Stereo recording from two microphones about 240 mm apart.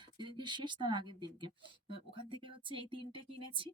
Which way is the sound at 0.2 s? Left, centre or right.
Centre.